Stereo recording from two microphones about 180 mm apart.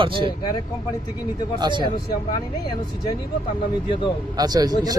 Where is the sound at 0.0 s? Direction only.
30° right (ahead or behind).